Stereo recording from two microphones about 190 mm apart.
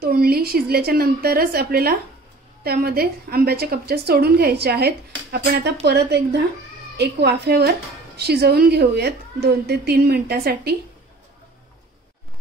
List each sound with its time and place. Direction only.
0.0 s a woman's voice: 55° right (ahead or behind)